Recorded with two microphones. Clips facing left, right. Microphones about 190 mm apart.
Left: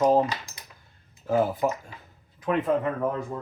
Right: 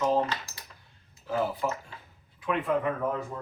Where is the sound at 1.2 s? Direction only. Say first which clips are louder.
Left 6 dB; 45° left (ahead or behind).